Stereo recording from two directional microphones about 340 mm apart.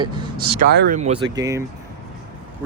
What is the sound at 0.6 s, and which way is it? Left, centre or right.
Speech, right.